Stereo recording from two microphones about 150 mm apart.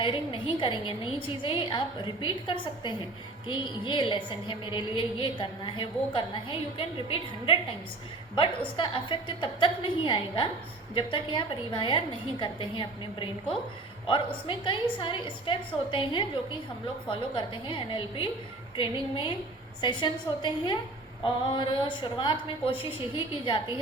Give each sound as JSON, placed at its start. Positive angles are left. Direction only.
{"t": 0.0, "sound": "a woman's voice", "side_deg": 35}
{"t": 14.4, "sound": "a woman's voice", "side_deg": 35}